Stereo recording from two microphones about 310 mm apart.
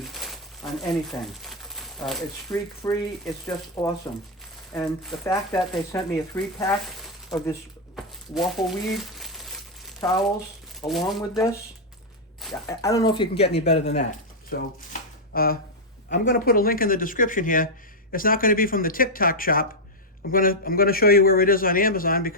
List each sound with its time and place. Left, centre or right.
0.0 s crumpling: centre
1.0 s speech: centre
2.8 s speech: centre
7.9 s crumpling: centre
10.8 s speech: centre
12.4 s a sound: centre
12.8 s speech: centre
13.4 s a man's voice: left